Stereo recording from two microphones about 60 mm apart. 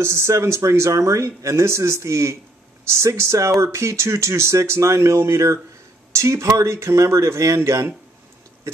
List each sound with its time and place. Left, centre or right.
0.0 s speech: right